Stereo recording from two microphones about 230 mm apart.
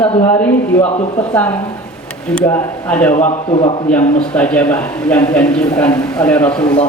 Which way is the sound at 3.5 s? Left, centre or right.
Left.